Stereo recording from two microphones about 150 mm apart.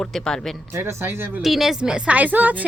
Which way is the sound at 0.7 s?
20° right (ahead or behind).